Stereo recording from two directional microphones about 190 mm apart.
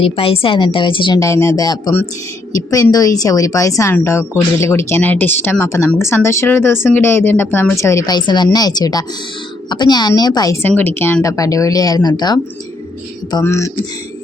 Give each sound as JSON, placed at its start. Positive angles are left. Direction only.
{"t": 0.0, "sound": "speech", "side_deg": 30}